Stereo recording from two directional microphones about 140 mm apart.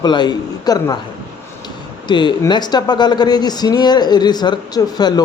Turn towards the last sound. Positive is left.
turn(degrees=30)  # may be behind; listen again after turning